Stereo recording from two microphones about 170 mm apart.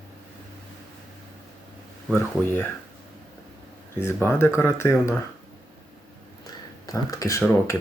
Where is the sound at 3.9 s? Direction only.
15° left (ahead or behind).